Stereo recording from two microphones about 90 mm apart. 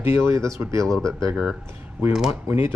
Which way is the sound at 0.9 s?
5° left (ahead or behind).